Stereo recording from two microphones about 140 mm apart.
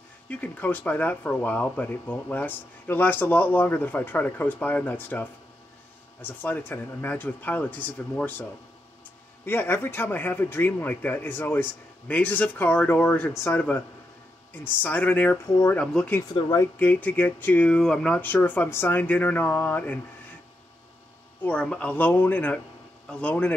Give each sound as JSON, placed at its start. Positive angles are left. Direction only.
{"t": 0.3, "sound": "speech", "side_deg": 10}
{"t": 16.2, "sound": "speech", "side_deg": 30}
{"t": 16.7, "sound": "speech", "side_deg": 10}
{"t": 21.4, "sound": "speech", "side_deg": 10}